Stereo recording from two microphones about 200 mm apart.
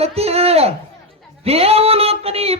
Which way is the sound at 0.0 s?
30° right (ahead or behind).